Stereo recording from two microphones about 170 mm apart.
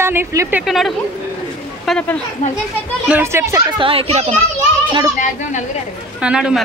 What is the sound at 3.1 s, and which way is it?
Speech, 15° right (ahead or behind).